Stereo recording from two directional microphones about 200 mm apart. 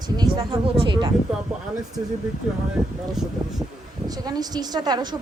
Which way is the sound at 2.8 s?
5° right (ahead or behind).